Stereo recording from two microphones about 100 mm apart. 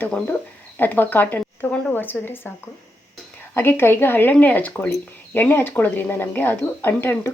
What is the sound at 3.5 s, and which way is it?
Speech, 20° left (ahead or behind).